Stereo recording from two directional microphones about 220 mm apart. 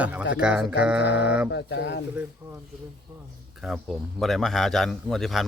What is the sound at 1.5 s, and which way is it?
Speech, 55° left (ahead or behind).